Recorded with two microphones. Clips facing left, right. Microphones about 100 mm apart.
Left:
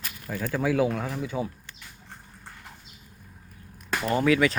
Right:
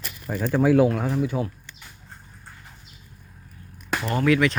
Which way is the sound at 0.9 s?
5° right (ahead or behind).